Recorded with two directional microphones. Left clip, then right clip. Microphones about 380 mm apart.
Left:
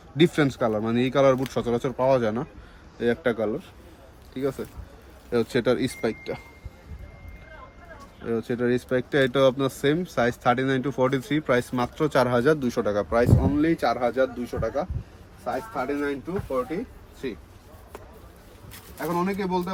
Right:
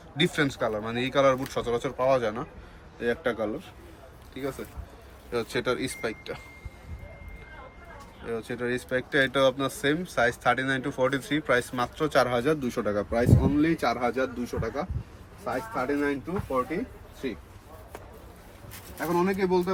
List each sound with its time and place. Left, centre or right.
0.2 s speech: left
8.3 s speech: left; by 14.8 s centre
16.0 s speech: centre
19.0 s speech: centre